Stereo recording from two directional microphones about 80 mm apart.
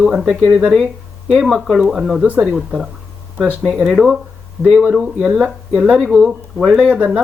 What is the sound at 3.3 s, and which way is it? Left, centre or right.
Speech, centre.